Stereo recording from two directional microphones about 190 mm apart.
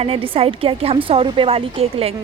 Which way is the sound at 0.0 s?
30° right (ahead or behind).